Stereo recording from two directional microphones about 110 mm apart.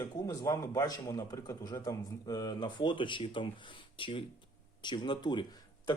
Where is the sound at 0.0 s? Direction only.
30° left (ahead or behind).